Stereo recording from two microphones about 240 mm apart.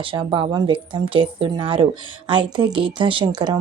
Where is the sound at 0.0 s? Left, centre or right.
Right.